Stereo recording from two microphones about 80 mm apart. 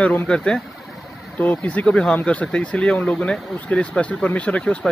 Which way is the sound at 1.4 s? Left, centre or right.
Left.